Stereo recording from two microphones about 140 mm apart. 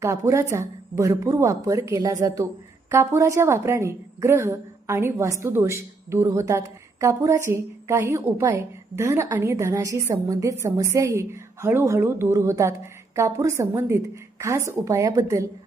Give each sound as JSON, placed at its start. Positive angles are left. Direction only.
{"t": 0.0, "sound": "a woman's voice", "side_deg": -20}